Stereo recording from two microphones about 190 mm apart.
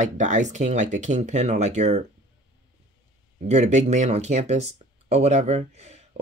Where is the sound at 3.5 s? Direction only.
35° right (ahead or behind).